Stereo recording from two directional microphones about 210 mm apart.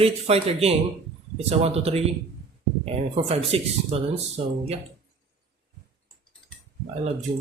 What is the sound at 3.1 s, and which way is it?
Speech, 30° right (ahead or behind).